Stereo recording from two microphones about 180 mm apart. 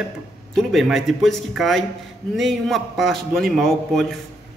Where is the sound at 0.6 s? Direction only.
Centre (ahead or behind).